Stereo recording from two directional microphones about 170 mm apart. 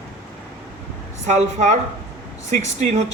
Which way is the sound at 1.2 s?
45° right (ahead or behind).